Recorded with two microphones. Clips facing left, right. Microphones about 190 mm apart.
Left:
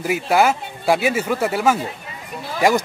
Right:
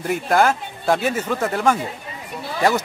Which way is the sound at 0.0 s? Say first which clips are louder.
Left 1 dB; 5° left (ahead or behind).